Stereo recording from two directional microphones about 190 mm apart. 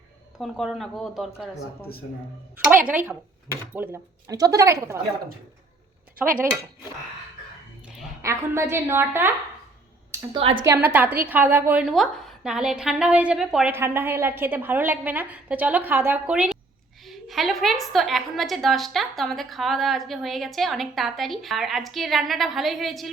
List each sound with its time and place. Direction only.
0.3 s a woman's voice: centre (ahead or behind)
2.8 s a woman's voice: 10° right (ahead or behind)
8.2 s a woman's voice: 15° right (ahead or behind)
10.7 s a woman's voice: 10° right (ahead or behind)